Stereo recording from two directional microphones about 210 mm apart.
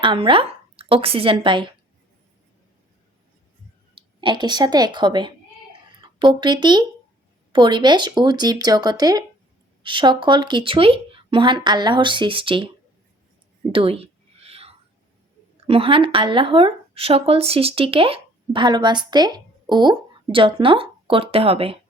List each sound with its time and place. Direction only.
0.0 s a woman's voice: 25° right (ahead or behind)
3.9 s speech: 20° right (ahead or behind)
13.7 s whispering: 25° right (ahead or behind)
15.6 s speech: 25° right (ahead or behind)